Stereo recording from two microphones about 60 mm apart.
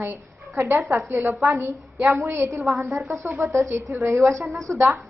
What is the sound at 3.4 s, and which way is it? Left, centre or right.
A woman's voice, right.